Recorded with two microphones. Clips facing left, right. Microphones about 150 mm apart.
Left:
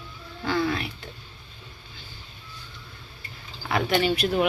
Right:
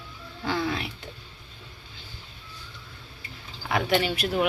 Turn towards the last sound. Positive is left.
turn(degrees=-10)  # may be behind; listen again after turning